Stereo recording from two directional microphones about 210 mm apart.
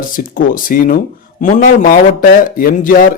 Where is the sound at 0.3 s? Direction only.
40° left (ahead or behind).